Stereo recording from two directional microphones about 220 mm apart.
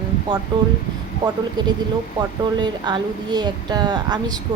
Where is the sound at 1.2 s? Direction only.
20° right (ahead or behind).